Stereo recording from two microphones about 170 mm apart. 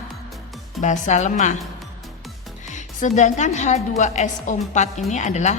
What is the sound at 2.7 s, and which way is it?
A woman's voice, 45° left (ahead or behind).